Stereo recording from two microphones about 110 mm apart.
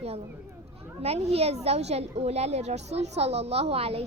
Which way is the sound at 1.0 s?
70° right (ahead or behind).